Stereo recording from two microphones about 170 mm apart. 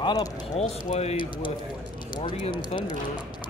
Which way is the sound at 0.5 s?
40° left (ahead or behind).